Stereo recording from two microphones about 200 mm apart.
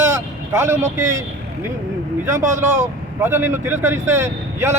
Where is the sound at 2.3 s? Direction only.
40° right (ahead or behind).